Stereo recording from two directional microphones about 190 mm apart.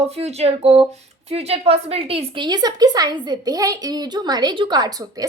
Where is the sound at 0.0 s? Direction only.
35° right (ahead or behind).